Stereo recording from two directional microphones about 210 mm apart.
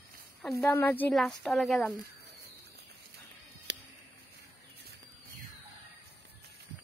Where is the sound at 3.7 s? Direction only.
55° right (ahead or behind).